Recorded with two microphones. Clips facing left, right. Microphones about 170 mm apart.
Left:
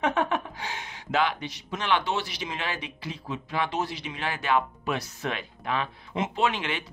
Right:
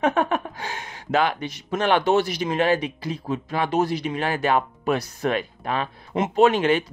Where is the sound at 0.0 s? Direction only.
45° right (ahead or behind).